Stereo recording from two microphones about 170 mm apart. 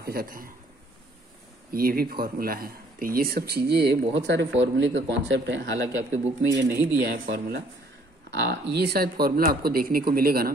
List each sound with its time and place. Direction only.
0.0 s speech: 60° right (ahead or behind)
1.7 s speech: 60° right (ahead or behind); by 6.8 s 90° right
7.1 s speech: 65° right (ahead or behind)
8.3 s speech: 75° right (ahead or behind)
8.7 s speech: 65° right (ahead or behind)